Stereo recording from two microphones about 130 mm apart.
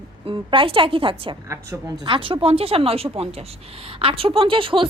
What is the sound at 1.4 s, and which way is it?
Speech, 20° right (ahead or behind).